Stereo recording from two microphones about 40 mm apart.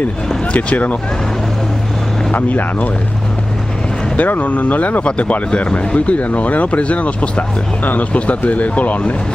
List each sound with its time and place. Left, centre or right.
0.5 s speech: left
2.3 s speech: left
4.2 s speech: left
5.0 s speech: left